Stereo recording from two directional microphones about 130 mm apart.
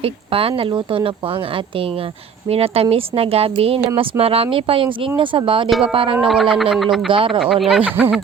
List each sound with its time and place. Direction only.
0.0 s speech: 45° right (ahead or behind)
2.5 s speech: 50° right (ahead or behind)
6.1 s speech: 5° right (ahead or behind)
7.1 s speech: 40° right (ahead or behind)
7.3 s speech: 5° right (ahead or behind)